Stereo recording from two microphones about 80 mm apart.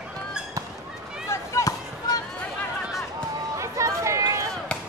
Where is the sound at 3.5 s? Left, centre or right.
Right.